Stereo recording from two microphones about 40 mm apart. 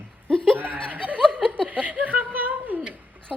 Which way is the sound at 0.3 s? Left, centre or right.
Left.